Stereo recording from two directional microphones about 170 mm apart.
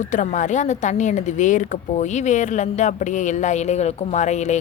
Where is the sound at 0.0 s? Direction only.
45° left (ahead or behind).